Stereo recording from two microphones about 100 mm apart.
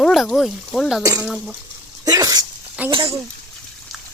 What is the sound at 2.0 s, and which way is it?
Speech, 35° right (ahead or behind).